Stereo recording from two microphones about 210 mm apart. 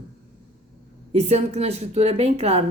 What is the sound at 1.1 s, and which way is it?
A woman's voice, 30° right (ahead or behind).